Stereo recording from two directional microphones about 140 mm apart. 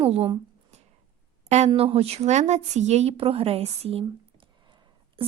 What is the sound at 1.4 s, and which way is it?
A woman's voice, 55° right (ahead or behind).